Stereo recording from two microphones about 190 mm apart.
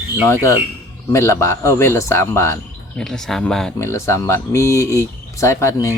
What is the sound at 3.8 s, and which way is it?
Speech, 15° left (ahead or behind).